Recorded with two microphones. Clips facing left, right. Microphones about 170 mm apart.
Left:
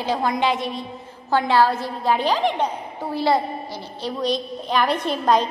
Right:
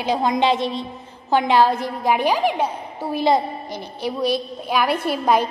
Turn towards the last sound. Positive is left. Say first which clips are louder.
# right 1 dB
turn(degrees=-10)  # may be behind; listen again after turning